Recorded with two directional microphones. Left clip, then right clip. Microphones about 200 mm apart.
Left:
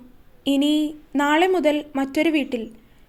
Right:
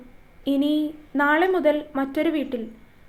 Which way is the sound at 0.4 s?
40° left (ahead or behind).